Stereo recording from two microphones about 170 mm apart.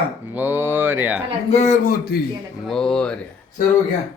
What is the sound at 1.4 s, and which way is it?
Speech, 40° left (ahead or behind).